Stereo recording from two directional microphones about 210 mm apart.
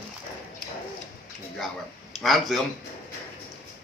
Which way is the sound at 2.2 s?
Centre (ahead or behind).